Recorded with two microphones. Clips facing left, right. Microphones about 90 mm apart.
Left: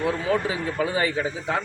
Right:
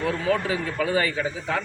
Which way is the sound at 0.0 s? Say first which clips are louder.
Even; 15° left (ahead or behind).